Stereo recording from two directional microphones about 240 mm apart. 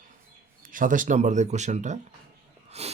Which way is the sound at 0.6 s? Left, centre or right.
Right.